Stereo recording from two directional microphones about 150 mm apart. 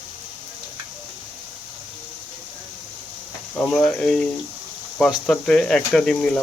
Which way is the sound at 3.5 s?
5° left (ahead or behind).